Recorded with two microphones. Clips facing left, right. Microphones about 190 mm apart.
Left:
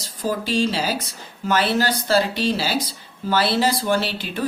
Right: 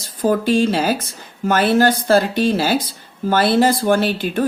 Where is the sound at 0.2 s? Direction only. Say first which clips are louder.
Right 6 dB; 55° right (ahead or behind).